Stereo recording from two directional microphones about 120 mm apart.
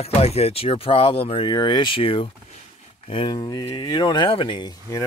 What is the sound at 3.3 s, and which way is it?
Speech, 30° left (ahead or behind).